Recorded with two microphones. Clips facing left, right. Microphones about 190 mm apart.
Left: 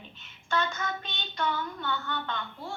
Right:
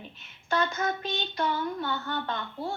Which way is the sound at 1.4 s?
35° right (ahead or behind).